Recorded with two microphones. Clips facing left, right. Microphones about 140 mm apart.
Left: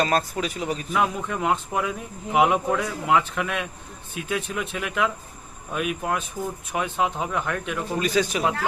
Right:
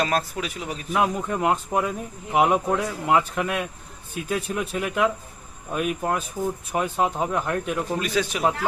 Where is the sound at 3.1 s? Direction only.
40° right (ahead or behind).